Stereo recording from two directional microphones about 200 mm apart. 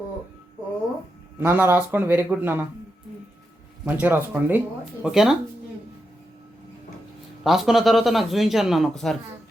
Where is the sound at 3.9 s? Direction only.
10° right (ahead or behind).